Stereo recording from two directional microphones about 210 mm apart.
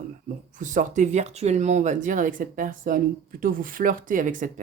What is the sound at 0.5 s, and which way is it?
Speech, 35° right (ahead or behind).